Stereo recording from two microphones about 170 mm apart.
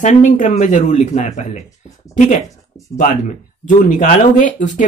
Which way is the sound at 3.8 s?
50° left (ahead or behind).